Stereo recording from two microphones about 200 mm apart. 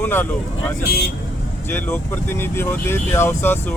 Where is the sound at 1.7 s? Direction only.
10° left (ahead or behind).